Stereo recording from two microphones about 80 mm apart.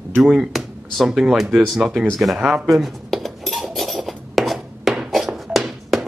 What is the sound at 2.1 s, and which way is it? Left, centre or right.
Cutlery, centre.